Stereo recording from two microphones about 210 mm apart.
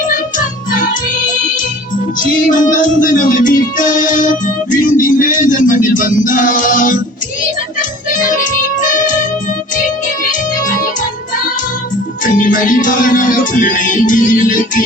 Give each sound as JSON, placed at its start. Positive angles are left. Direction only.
{"t": 2.5, "sound": "music", "side_deg": 40}
{"t": 12.2, "sound": "music", "side_deg": 40}